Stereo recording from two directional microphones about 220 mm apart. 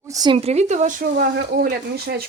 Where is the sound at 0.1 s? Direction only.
20° right (ahead or behind).